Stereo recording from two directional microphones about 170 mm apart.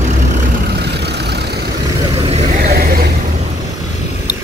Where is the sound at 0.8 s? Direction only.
75° right (ahead or behind).